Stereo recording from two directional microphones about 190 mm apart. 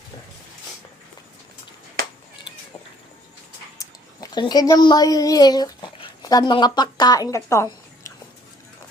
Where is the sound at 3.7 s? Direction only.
20° left (ahead or behind).